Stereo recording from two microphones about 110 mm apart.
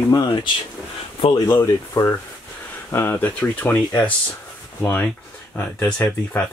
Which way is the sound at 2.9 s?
25° left (ahead or behind).